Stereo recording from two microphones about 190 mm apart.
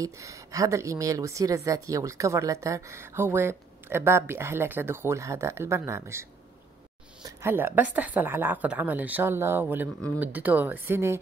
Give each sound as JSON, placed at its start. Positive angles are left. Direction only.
{"t": 0.0, "sound": "a woman's voice", "side_deg": -15}
{"t": 7.2, "sound": "a woman's voice", "side_deg": -15}